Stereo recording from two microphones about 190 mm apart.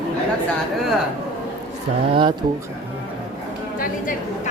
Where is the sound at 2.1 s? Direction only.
25° right (ahead or behind).